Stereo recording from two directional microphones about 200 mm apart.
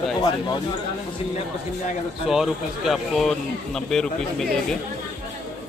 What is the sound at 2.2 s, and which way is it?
Speech, centre (ahead or behind).